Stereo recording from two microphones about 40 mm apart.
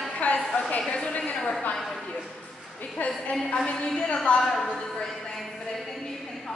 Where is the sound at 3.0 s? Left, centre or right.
Left.